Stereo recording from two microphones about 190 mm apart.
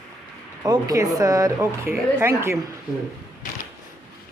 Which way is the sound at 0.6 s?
20° right (ahead or behind).